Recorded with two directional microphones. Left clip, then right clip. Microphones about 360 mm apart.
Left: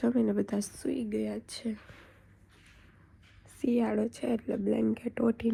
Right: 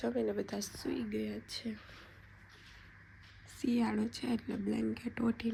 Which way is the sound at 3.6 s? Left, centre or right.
Centre.